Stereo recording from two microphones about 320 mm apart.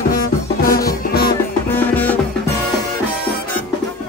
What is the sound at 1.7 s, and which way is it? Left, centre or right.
Music, centre.